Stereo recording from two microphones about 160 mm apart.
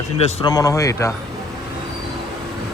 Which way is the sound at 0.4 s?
20° left (ahead or behind).